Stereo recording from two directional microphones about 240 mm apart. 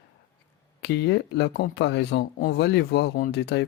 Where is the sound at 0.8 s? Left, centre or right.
Left.